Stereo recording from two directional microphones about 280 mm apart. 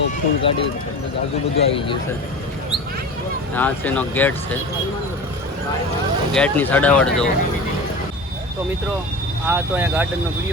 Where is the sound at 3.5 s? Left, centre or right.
Centre.